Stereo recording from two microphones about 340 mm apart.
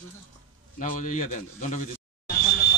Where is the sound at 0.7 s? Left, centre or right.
Left.